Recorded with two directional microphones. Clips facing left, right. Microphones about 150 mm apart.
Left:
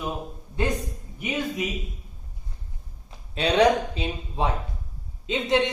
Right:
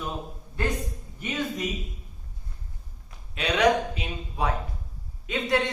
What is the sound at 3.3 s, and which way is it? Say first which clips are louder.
A man's voice: left 3 dB; 30° left (ahead or behind).